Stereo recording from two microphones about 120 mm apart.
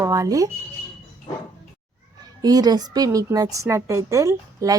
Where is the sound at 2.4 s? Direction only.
35° right (ahead or behind).